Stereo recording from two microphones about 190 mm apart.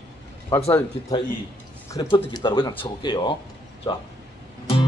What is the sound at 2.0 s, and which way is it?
Speech, 25° left (ahead or behind).